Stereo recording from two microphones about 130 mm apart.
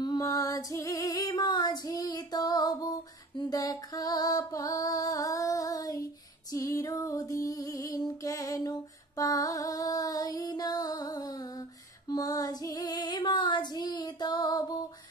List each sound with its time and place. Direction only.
0.0 s female singing: 30° left (ahead or behind)
3.3 s music: 30° left (ahead or behind)
6.5 s female singing: 25° left (ahead or behind)